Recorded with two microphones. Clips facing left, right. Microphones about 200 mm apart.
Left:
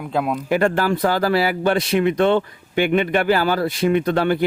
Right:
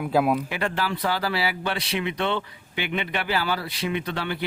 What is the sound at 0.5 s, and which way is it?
Speech, 45° left (ahead or behind).